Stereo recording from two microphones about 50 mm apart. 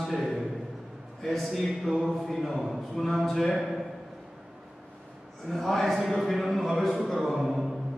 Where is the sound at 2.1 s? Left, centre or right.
Centre.